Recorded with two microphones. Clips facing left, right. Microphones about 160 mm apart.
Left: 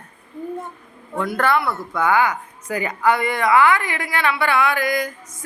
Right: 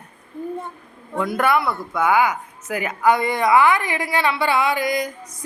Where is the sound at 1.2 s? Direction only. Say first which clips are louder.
Even; 15° right (ahead or behind).